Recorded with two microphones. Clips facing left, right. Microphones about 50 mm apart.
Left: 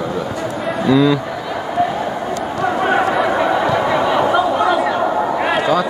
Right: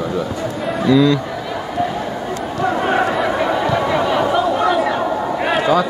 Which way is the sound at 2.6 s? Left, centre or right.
Centre.